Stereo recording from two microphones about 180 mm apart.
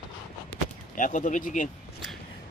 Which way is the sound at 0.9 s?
45° left (ahead or behind).